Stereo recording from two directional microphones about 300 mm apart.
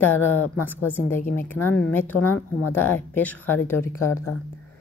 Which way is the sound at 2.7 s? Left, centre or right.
Centre.